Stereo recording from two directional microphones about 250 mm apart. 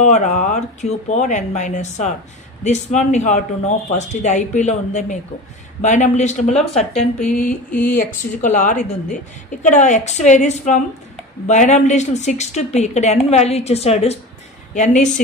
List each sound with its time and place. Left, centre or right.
0.0 s a woman's voice: left